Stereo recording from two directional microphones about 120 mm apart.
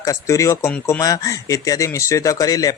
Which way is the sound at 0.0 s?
25° left (ahead or behind).